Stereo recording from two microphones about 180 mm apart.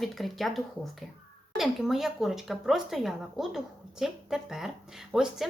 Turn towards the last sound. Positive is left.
turn(degrees=-5)  # may be behind; listen again after turning